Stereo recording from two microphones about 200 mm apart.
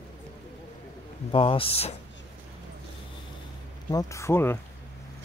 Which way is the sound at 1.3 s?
25° left (ahead or behind).